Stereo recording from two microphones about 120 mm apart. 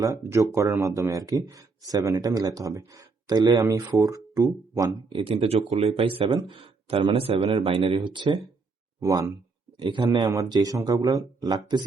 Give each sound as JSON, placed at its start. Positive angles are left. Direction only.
{"t": 0.0, "sound": "speech", "side_deg": -25}
{"t": 5.0, "sound": "speech", "side_deg": -45}
{"t": 9.0, "sound": "speech", "side_deg": -25}
{"t": 9.8, "sound": "speech", "side_deg": -40}